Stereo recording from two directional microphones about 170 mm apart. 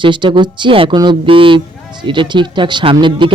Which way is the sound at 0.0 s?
30° right (ahead or behind).